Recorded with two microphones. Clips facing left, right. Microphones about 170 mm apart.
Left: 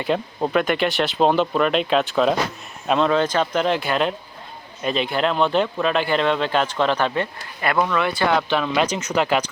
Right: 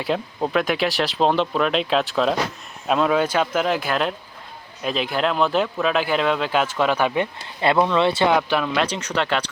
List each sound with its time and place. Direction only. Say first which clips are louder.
0.0 s speech: left 1 dB; centre (ahead or behind)
7.6 s speech: right 3 dB; 25° right (ahead or behind); by 9.4 s 5° left (ahead or behind)